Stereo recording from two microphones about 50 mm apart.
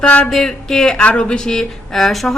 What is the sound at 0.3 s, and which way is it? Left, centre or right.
A woman's voice, centre.